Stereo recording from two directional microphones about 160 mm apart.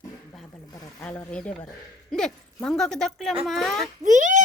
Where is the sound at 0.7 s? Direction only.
25° left (ahead or behind).